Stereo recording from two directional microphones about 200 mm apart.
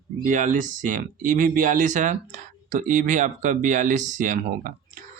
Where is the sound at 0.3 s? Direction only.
40° right (ahead or behind).